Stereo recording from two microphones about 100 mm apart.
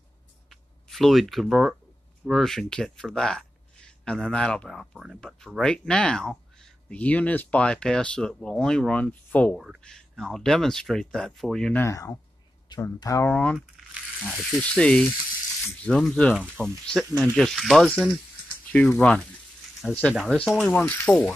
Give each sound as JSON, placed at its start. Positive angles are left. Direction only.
{"t": 0.5, "sound": "a sound", "side_deg": 0}
{"t": 2.2, "sound": "speech", "side_deg": 0}
{"t": 4.9, "sound": "speech", "side_deg": -5}
{"t": 5.6, "sound": "speech", "side_deg": 5}
{"t": 11.7, "sound": "speech", "side_deg": 30}
{"t": 13.3, "sound": "speech", "side_deg": 15}
{"t": 14.2, "sound": "speech", "side_deg": -5}
{"t": 14.6, "sound": "speech", "side_deg": 10}
{"t": 20.7, "sound": "speech", "side_deg": 20}